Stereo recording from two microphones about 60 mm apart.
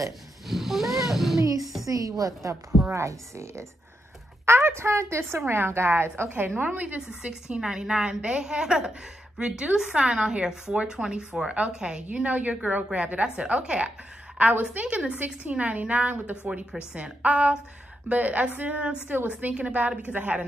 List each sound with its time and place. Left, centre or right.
0.5 s speech: centre
1.0 s cat: centre
1.6 s a sound: centre
1.9 s speech: right
2.9 s a woman's voice: right
4.5 s a woman's voice: right
7.2 s a woman's voice: centre